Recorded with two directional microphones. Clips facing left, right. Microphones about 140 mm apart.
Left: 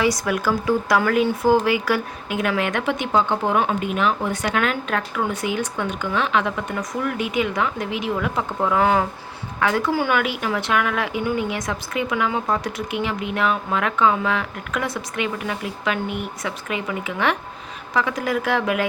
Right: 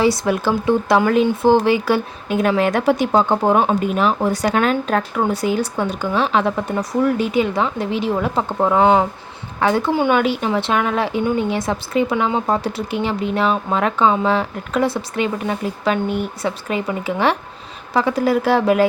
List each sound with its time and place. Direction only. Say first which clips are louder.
0.0 s speech: right 4 dB; 30° right (ahead or behind)